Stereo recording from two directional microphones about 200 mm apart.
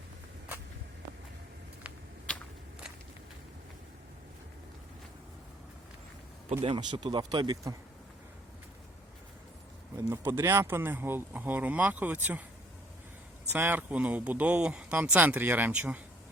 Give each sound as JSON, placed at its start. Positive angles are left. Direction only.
{"t": 2.3, "sound": "biting", "side_deg": 5}
{"t": 6.5, "sound": "speech", "side_deg": -30}
{"t": 10.1, "sound": "speech", "side_deg": -15}
{"t": 13.5, "sound": "speech", "side_deg": -10}